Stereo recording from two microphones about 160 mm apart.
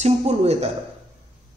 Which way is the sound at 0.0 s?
40° right (ahead or behind).